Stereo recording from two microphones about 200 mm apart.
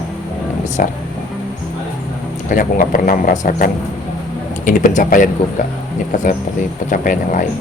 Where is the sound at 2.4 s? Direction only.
40° left (ahead or behind).